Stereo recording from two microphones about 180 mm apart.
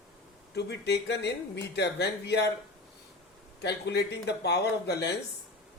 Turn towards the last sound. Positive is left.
turn(degrees=65)  # may be behind; listen again after turning